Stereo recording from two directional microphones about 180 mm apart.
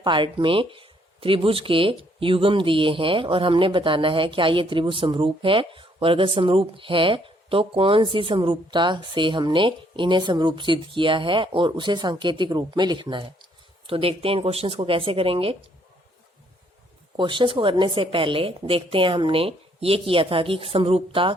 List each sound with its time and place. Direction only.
0.0 s speech: 25° right (ahead or behind)
17.2 s speech: 25° right (ahead or behind)